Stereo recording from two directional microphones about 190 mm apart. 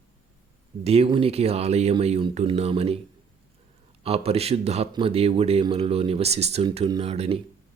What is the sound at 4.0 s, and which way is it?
A man's voice, 30° right (ahead or behind).